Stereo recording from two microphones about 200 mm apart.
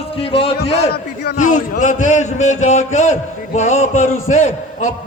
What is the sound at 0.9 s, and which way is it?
Speech, 55° left (ahead or behind).